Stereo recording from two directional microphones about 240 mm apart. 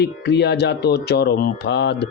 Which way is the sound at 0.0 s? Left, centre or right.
Left.